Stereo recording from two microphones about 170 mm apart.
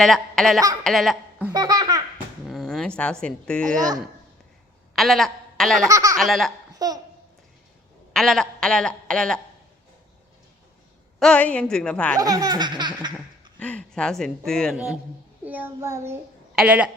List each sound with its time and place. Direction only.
0.0 s a woman's voice: centre (ahead or behind)
1.5 s laughter: 20° right (ahead or behind)
2.5 s a woman's voice: centre (ahead or behind)
4.9 s a man's voice: centre (ahead or behind)
5.9 s laughter: 20° right (ahead or behind)
6.1 s a woman's voice: centre (ahead or behind)
6.7 s babbling: 20° right (ahead or behind)
8.1 s a woman's voice: centre (ahead or behind)
11.2 s a woman's voice: 5° left (ahead or behind)
12.2 s laughter: 20° right (ahead or behind)
13.1 s speech: 10° left (ahead or behind)
15.4 s child singing: 10° right (ahead or behind)